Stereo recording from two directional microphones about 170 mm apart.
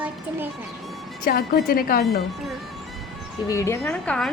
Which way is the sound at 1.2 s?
55° left (ahead or behind).